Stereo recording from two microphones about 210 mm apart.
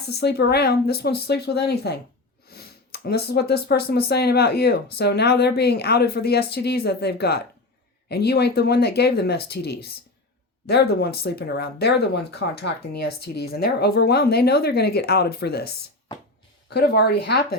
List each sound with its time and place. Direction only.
0.0 s speech: 50° left (ahead or behind)